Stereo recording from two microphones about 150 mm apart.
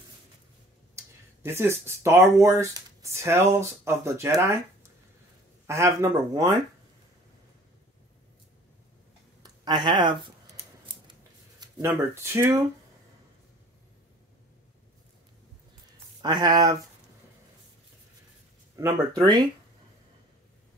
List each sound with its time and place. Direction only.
0.9 s speech: 15° right (ahead or behind)
5.7 s speech: 20° right (ahead or behind)
9.4 s a sound: 30° right (ahead or behind)
11.9 s speech: 15° right (ahead or behind)
16.2 s speech: 30° right (ahead or behind)
18.8 s speech: 20° right (ahead or behind)